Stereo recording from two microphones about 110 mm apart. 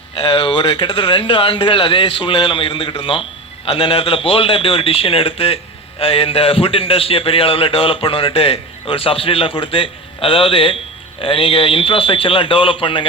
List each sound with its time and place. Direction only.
0.3 s a man's voice: 55° left (ahead or behind)